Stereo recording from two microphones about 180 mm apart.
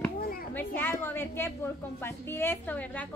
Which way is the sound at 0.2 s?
55° left (ahead or behind).